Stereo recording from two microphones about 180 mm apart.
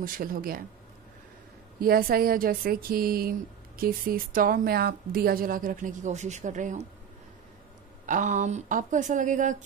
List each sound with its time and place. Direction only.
0.0 s a woman's voice: 55° right (ahead or behind)
1.8 s a woman's voice: 55° right (ahead or behind)
8.1 s a woman's voice: 45° right (ahead or behind)